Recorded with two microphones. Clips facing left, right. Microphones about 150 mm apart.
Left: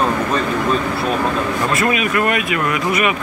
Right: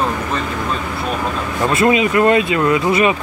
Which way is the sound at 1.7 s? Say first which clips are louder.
Right 7 dB; 25° right (ahead or behind).